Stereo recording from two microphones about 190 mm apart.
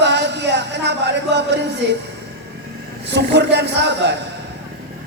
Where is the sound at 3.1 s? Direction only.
65° right (ahead or behind).